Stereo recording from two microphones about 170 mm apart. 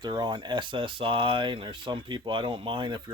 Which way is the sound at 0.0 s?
25° right (ahead or behind).